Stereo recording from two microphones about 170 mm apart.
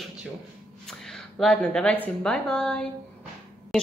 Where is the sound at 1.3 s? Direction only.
5° left (ahead or behind).